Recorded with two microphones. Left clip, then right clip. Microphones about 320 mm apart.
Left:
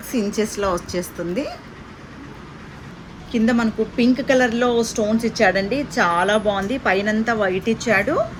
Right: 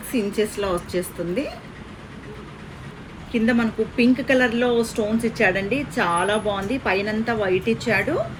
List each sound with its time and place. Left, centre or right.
0.1 s a woman's voice: left
3.3 s a woman's voice: left